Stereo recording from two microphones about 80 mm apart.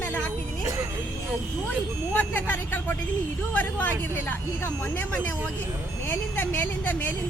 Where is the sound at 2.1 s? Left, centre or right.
Centre.